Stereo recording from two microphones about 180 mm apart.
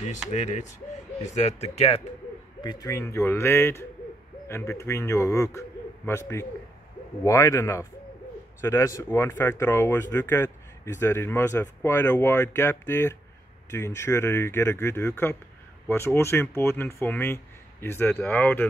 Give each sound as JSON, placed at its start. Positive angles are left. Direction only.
{"t": 0.3, "sound": "speech", "side_deg": 40}
{"t": 2.6, "sound": "speech", "side_deg": 20}